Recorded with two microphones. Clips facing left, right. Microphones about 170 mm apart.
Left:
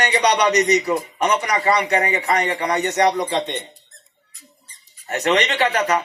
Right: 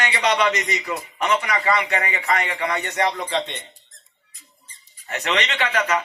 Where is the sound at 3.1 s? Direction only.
15° left (ahead or behind).